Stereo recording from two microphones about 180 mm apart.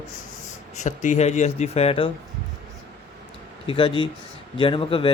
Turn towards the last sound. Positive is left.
turn(degrees=30)  # may be behind; listen again after turning